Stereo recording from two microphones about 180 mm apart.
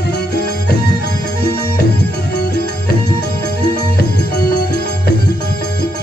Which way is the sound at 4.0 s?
60° left (ahead or behind).